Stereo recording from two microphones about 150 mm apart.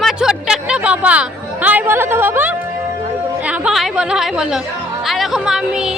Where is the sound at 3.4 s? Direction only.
10° right (ahead or behind).